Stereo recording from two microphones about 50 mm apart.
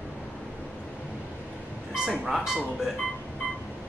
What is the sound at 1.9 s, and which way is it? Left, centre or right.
Speech, centre.